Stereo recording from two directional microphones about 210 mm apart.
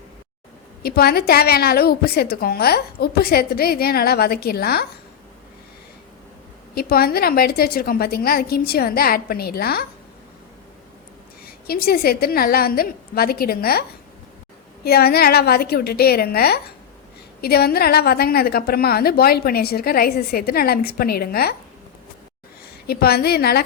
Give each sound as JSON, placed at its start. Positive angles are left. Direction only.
{"t": 0.8, "sound": "a woman's voice", "side_deg": 45}
{"t": 6.7, "sound": "a woman's voice", "side_deg": 45}
{"t": 11.4, "sound": "a woman's voice", "side_deg": 45}
{"t": 14.8, "sound": "a woman's voice", "side_deg": 50}
{"t": 22.9, "sound": "a woman's voice", "side_deg": 50}